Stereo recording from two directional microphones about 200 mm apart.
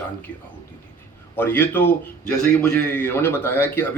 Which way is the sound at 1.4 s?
10° left (ahead or behind).